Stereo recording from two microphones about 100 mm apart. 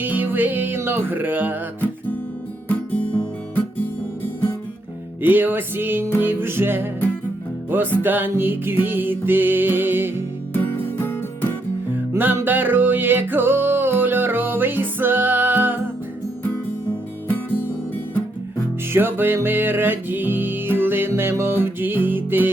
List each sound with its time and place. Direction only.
0.0 s music: 20° right (ahead or behind)
5.2 s music: 20° right (ahead or behind)
10.5 s music: 20° left (ahead or behind)
12.1 s music: 20° right (ahead or behind)
18.9 s music: 20° right (ahead or behind)